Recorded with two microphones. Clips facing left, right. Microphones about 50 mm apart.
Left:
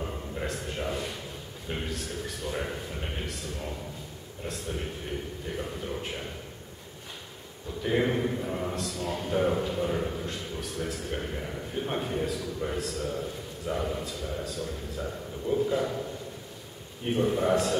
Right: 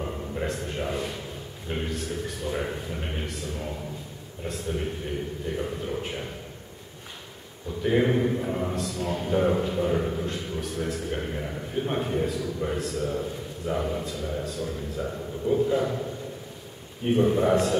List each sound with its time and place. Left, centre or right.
0.0 s a man's voice: centre
7.8 s a man's voice: centre
17.0 s a man's voice: centre